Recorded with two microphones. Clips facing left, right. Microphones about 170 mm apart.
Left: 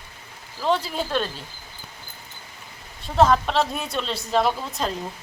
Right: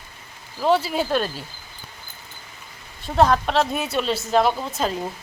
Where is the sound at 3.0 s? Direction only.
Centre (ahead or behind).